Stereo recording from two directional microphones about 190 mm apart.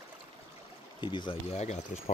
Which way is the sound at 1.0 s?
25° left (ahead or behind).